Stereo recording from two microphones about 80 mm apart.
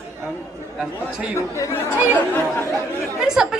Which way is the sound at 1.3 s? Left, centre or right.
Left.